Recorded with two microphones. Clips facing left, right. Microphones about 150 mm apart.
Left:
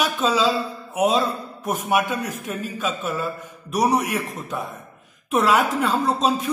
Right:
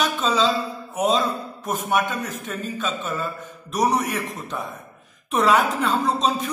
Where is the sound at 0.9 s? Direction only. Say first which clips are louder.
Left 1 dB; 10° left (ahead or behind).